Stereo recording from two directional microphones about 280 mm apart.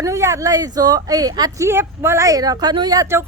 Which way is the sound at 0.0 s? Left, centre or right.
Centre.